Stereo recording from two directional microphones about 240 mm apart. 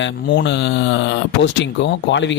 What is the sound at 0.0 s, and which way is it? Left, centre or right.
Speech, left.